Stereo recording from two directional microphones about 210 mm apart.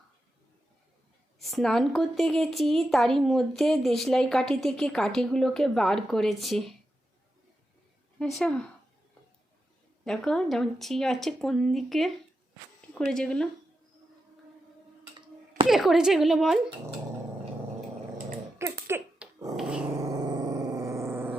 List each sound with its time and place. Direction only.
1.4 s a woman's voice: centre (ahead or behind)
8.2 s a woman's voice: 5° left (ahead or behind)
10.0 s a woman's voice: centre (ahead or behind)
15.6 s a woman's voice: centre (ahead or behind)
18.9 s dog: 10° right (ahead or behind)
20.2 s a sound: 20° right (ahead or behind)